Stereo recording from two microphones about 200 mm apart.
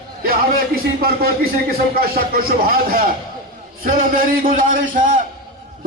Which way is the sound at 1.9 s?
45° right (ahead or behind).